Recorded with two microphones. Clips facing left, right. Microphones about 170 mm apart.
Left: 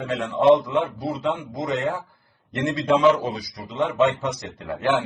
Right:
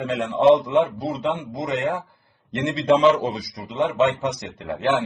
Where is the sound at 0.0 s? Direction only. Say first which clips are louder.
Right 2 dB; 20° right (ahead or behind).